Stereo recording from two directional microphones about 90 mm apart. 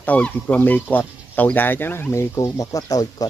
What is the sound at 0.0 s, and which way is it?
Speech, 15° left (ahead or behind).